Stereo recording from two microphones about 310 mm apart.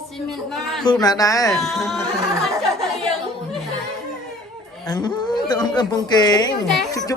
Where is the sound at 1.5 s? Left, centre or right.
Centre.